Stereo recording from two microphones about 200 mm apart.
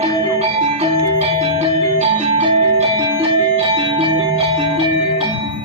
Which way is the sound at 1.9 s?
30° right (ahead or behind).